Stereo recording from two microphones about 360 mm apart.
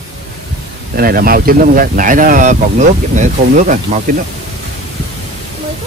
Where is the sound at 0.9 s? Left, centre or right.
Right.